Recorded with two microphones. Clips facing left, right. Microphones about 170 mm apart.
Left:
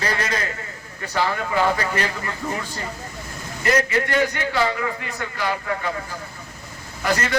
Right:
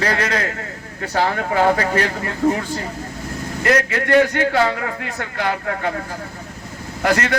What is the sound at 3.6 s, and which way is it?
A man's voice, 65° right (ahead or behind).